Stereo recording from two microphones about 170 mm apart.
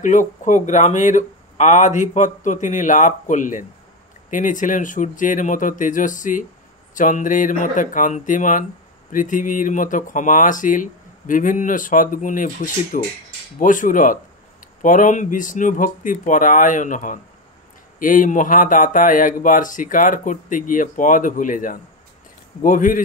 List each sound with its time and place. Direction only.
0.0 s speech: 45° left (ahead or behind)